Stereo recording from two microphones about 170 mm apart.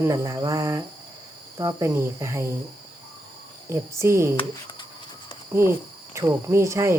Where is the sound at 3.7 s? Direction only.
15° right (ahead or behind).